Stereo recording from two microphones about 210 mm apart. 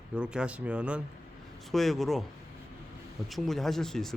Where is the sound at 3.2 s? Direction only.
Centre (ahead or behind).